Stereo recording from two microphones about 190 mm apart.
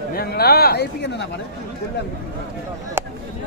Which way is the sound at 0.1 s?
55° left (ahead or behind).